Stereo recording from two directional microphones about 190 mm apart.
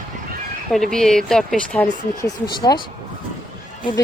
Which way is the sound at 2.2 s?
20° left (ahead or behind).